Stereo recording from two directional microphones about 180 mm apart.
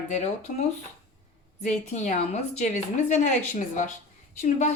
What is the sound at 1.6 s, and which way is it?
A woman's voice, 45° left (ahead or behind).